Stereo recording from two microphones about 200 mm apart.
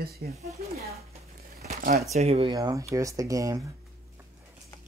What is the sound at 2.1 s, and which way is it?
Speech, 30° right (ahead or behind).